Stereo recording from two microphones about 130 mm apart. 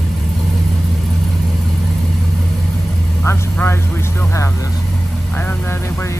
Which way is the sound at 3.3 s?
20° left (ahead or behind).